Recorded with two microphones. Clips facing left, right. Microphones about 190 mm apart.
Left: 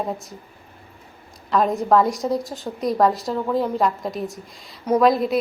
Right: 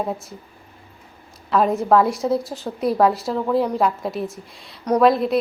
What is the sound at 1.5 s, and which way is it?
A woman's voice, centre (ahead or behind).